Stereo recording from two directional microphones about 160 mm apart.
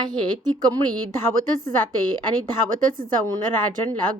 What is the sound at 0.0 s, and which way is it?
Speech, 25° right (ahead or behind).